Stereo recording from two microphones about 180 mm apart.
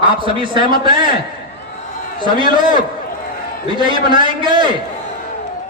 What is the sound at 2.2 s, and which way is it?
A man's voice, 25° right (ahead or behind).